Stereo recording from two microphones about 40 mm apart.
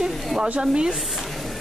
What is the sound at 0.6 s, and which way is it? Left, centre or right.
Speech, centre.